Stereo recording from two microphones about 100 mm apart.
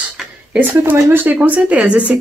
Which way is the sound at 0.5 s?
20° right (ahead or behind).